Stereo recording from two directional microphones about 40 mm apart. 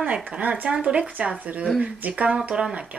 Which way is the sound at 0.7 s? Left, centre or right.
Right.